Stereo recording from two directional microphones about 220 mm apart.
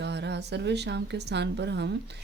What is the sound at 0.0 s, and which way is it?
A woman's voice, 50° right (ahead or behind).